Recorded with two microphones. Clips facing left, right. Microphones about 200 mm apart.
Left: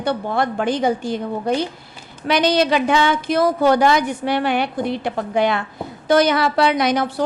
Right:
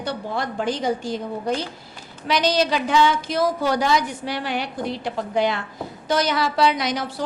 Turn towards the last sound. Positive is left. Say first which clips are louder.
# left 7 dB
turn(degrees=60)  # may be behind; listen again after turning